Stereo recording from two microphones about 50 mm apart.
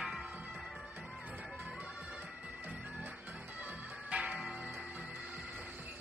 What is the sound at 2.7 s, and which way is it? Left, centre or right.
Music, right.